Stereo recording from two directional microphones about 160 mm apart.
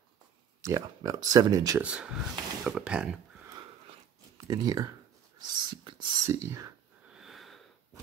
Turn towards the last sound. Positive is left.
turn(degrees=0)  # may be behind; listen again after turning